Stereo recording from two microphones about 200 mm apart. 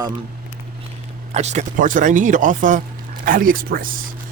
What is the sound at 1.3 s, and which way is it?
Speech, 35° right (ahead or behind).